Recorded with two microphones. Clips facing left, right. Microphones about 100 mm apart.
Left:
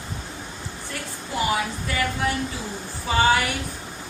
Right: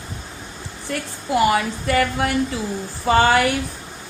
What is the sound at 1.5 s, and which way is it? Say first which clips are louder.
A woman's voice: right 6 dB; 75° right (ahead or behind).